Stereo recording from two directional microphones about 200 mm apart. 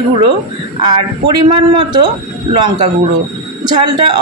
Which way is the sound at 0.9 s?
25° right (ahead or behind).